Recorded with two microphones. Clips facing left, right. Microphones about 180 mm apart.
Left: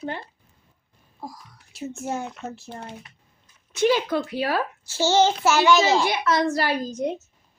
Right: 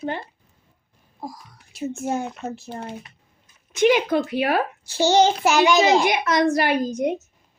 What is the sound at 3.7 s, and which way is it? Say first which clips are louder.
A child's voice: right 3 dB; 15° right (ahead or behind).